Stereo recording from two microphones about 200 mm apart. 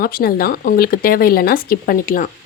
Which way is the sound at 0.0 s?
45° left (ahead or behind).